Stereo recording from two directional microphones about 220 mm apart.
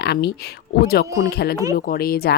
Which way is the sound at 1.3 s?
45° left (ahead or behind).